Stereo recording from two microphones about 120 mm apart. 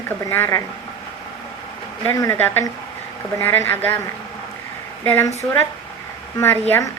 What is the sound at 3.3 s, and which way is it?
Speech, 20° left (ahead or behind).